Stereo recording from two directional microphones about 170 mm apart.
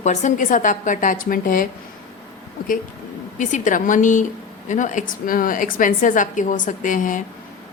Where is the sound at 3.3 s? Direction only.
50° left (ahead or behind).